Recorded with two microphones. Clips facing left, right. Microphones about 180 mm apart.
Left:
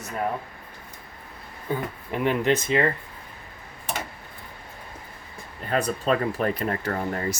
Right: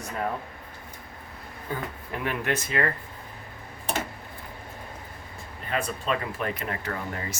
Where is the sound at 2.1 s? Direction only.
20° left (ahead or behind).